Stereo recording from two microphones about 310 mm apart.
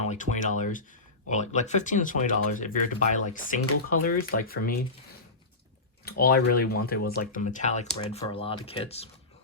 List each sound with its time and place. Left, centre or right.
0.0 s speech: left
6.1 s speech: left